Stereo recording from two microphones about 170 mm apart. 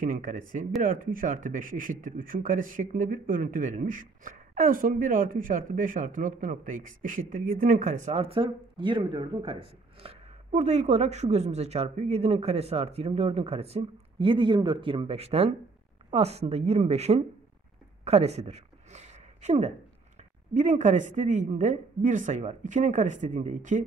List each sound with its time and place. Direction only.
0.0 s speech: 50° right (ahead or behind)
18.0 s a sound: 40° right (ahead or behind)
20.5 s speech: 45° right (ahead or behind)